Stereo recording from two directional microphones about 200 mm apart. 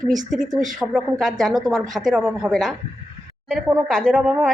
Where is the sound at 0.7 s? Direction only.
5° right (ahead or behind).